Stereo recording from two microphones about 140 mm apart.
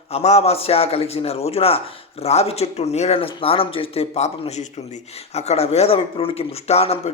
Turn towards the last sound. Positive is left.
turn(degrees=45)  # may be behind; listen again after turning